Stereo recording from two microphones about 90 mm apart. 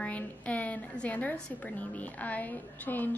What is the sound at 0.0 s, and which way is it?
A woman's voice, 15° left (ahead or behind).